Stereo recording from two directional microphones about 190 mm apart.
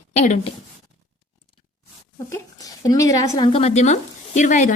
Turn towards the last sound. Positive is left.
turn(degrees=40)  # may be behind; listen again after turning